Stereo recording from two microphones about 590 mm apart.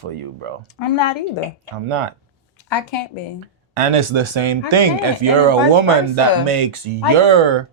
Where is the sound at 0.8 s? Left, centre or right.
Left.